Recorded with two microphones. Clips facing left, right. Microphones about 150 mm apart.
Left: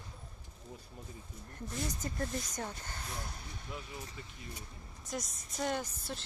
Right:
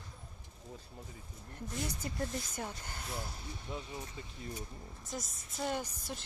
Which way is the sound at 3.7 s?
25° right (ahead or behind).